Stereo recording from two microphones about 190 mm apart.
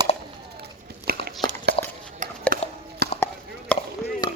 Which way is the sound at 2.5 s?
50° right (ahead or behind).